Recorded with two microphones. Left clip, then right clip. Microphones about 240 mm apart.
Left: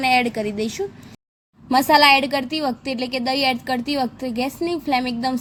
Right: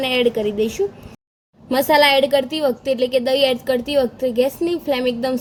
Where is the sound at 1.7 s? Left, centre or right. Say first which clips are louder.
Even; centre.